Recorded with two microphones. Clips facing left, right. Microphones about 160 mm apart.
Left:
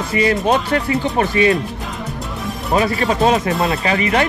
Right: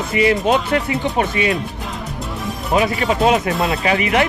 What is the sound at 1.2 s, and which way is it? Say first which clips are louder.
Speech: left 4 dB; 40° left (ahead or behind).